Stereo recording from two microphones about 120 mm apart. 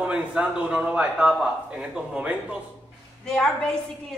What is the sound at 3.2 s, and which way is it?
Speech, 5° left (ahead or behind).